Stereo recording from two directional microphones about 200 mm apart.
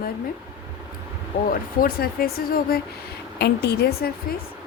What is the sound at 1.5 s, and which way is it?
A woman's voice, 50° left (ahead or behind).